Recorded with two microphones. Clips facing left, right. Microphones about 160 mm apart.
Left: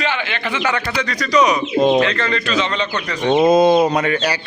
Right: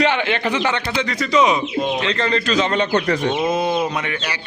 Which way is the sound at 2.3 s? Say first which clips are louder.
Right 2 dB; 45° right (ahead or behind).